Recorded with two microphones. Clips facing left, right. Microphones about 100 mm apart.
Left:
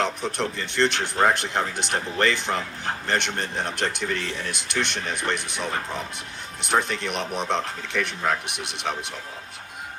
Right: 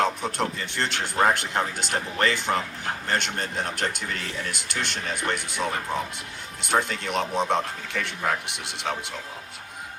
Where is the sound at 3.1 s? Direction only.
20° left (ahead or behind).